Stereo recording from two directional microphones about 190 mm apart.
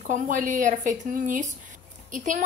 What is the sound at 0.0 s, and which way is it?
A woman's voice, 40° right (ahead or behind).